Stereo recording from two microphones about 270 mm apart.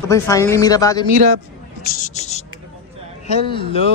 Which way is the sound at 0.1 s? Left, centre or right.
Centre.